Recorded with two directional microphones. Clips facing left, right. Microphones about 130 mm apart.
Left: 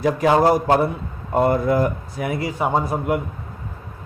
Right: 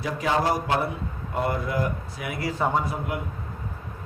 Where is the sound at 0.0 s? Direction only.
50° left (ahead or behind).